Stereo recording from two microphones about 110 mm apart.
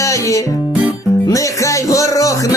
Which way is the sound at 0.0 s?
30° left (ahead or behind).